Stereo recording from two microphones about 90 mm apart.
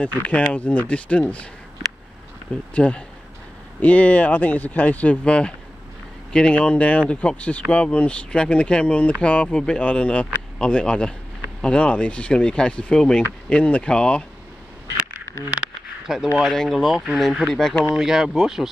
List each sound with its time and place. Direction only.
0.0 s speech: 15° left (ahead or behind)
2.7 s speech: 15° left (ahead or behind)
15.6 s a sound: 5° right (ahead or behind)
16.4 s speech: centre (ahead or behind)